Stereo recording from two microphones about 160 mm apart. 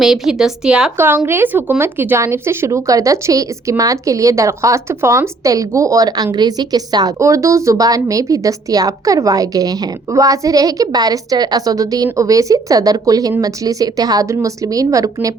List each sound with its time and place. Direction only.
0.0 s speech: centre (ahead or behind); by 15.3 s 20° right (ahead or behind)